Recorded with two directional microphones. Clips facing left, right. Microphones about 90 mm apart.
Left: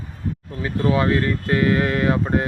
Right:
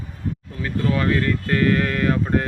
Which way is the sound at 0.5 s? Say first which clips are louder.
Left 3 dB; 40° left (ahead or behind).